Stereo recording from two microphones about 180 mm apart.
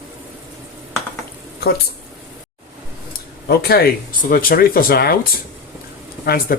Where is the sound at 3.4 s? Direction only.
60° left (ahead or behind).